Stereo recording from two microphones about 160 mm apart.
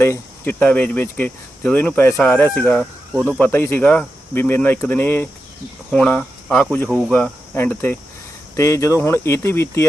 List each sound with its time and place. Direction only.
0.0 s speech: 15° left (ahead or behind)